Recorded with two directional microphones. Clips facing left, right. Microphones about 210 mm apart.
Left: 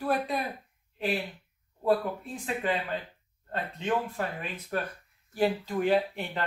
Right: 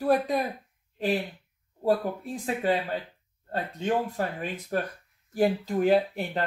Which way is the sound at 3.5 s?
40° right (ahead or behind).